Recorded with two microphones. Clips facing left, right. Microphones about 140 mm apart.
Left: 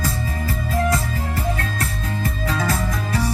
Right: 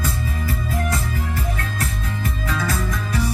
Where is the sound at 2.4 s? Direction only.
40° left (ahead or behind).